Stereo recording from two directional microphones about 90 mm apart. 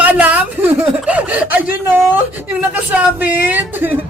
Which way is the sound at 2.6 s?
20° right (ahead or behind).